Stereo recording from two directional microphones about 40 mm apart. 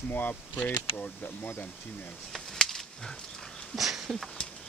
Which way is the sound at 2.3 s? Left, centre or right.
Centre.